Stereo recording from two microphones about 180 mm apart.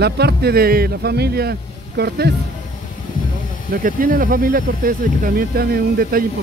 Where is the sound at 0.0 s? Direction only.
65° right (ahead or behind).